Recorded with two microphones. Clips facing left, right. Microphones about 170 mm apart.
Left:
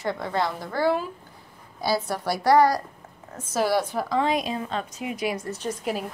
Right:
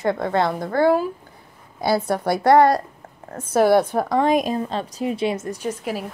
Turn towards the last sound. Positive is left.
turn(degrees=-5)  # may be behind; listen again after turning